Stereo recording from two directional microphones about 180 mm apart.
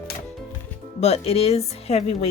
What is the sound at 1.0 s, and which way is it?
Speech, 35° left (ahead or behind).